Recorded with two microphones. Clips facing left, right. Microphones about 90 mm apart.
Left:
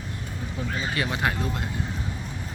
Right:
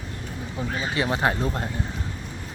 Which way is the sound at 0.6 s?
25° right (ahead or behind).